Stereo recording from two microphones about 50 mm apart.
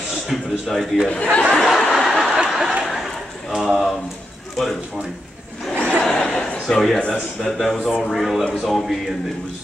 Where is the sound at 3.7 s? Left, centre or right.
Centre.